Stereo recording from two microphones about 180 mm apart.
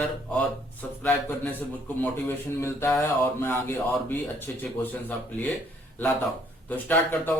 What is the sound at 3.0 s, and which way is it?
Speech, 15° left (ahead or behind).